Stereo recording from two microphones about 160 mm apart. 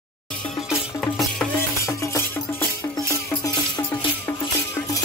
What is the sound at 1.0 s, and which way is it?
Music, centre (ahead or behind).